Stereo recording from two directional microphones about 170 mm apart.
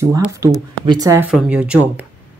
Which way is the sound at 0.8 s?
20° right (ahead or behind).